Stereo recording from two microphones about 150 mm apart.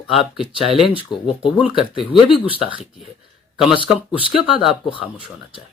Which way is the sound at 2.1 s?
35° left (ahead or behind).